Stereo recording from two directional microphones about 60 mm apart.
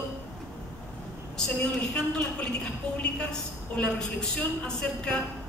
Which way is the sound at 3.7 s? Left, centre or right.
Centre.